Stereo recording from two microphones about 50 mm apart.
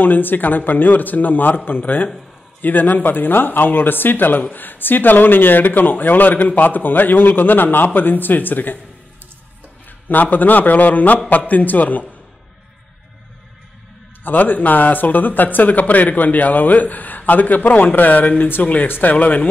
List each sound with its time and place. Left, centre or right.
0.0 s speech: left
9.8 s speech: left
14.2 s speech: left